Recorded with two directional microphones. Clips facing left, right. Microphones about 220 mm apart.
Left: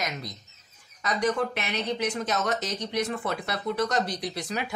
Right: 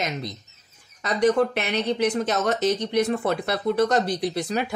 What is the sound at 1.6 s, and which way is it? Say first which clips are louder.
Speech: right 6 dB; 30° right (ahead or behind).